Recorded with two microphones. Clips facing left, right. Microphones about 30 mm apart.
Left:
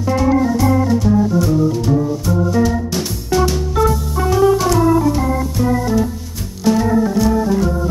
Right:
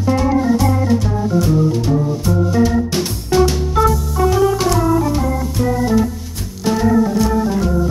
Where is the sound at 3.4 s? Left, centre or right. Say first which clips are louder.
Right 2 dB; centre.